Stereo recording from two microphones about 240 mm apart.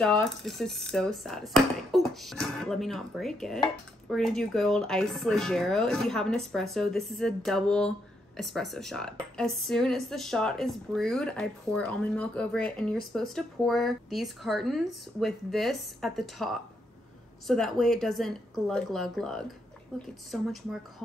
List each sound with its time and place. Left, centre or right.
0.0 s speech: centre